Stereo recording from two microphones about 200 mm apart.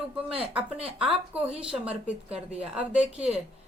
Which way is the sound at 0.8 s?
30° right (ahead or behind).